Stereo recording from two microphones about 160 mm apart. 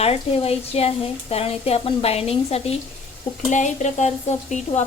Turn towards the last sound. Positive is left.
turn(degrees=45)  # may be behind; listen again after turning